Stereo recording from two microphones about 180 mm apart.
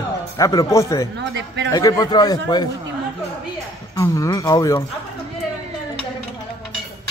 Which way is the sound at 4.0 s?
20° left (ahead or behind).